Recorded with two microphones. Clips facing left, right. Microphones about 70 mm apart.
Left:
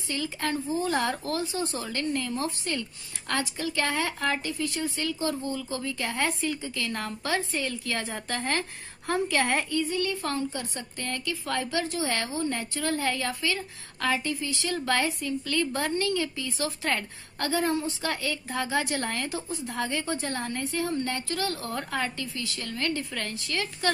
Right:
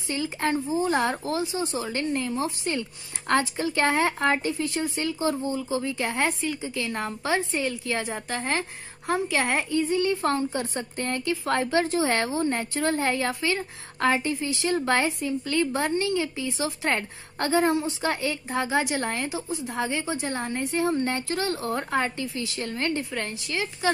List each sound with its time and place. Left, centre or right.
0.1 s a woman's voice: right
1.6 s a woman's voice: centre
1.9 s a woman's voice: right
9.8 s a woman's voice: right